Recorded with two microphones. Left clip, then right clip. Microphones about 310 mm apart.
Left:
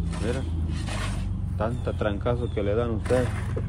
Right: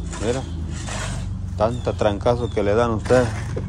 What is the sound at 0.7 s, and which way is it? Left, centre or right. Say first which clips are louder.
Filing: right 4 dB; right.